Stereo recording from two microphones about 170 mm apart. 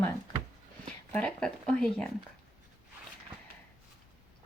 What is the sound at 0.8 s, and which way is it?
Speech, 5° left (ahead or behind).